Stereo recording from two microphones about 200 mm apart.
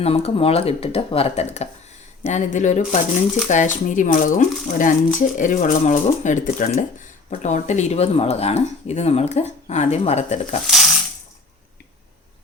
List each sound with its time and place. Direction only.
0.0 s speech: 30° left (ahead or behind)